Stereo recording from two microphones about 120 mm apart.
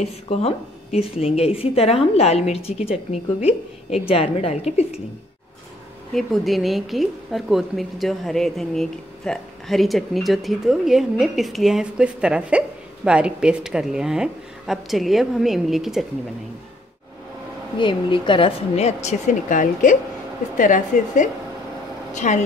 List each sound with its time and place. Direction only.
0.0 s a woman's voice: 60° left (ahead or behind)
6.1 s a woman's voice: centre (ahead or behind)
17.7 s speech: 40° left (ahead or behind)
18.8 s a woman's voice: 65° left (ahead or behind); by 22.4 s 85° left